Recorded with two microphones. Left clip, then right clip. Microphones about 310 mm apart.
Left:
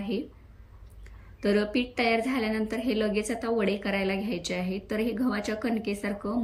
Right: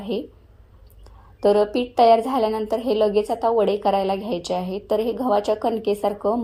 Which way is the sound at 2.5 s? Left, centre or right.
Right.